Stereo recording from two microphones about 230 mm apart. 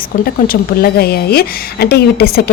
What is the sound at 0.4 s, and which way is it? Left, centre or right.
A woman's voice, left.